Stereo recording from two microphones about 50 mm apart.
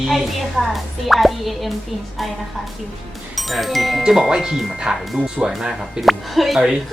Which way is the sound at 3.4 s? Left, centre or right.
Centre.